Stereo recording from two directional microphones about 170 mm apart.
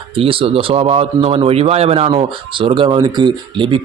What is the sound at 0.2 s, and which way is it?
Speech, 30° right (ahead or behind).